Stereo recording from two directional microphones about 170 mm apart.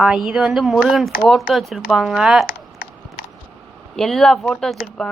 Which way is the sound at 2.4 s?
55° left (ahead or behind).